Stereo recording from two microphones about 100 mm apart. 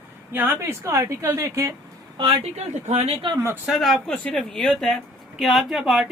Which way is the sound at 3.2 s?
55° right (ahead or behind).